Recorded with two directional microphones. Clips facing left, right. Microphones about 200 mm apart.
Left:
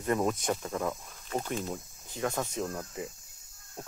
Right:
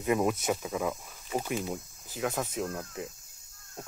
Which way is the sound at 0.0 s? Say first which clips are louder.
Right 2 dB; 10° right (ahead or behind).